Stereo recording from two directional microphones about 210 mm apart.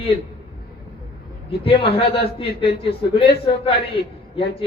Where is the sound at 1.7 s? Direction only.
25° left (ahead or behind).